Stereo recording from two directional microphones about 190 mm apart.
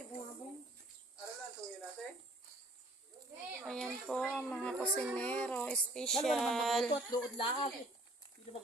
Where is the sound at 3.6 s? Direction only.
Centre (ahead or behind).